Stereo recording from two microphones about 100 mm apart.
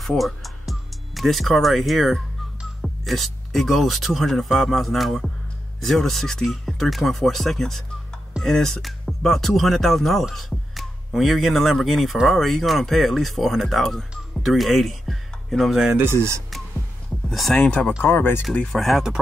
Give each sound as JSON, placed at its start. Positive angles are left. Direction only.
{"t": 0.0, "sound": "speech", "side_deg": 0}
{"t": 17.3, "sound": "speech", "side_deg": 0}
{"t": 18.0, "sound": "speech", "side_deg": 20}
{"t": 18.4, "sound": "speech", "side_deg": 5}